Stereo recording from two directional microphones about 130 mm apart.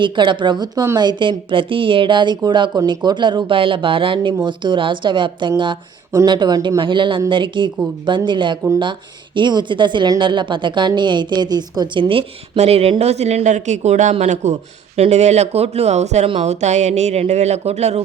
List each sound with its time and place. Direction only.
0.0 s speech: 40° right (ahead or behind); by 18.0 s 55° right (ahead or behind)